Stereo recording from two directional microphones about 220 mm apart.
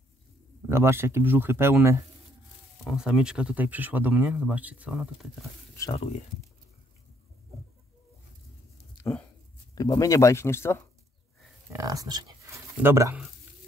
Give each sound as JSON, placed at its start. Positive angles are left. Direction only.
{"t": 0.7, "sound": "speech", "side_deg": -10}
{"t": 3.0, "sound": "speech", "side_deg": -5}
{"t": 5.8, "sound": "speech", "side_deg": 25}
{"t": 9.0, "sound": "a sound", "side_deg": 10}
{"t": 9.8, "sound": "speech", "side_deg": 15}
{"t": 11.7, "sound": "speech", "side_deg": -15}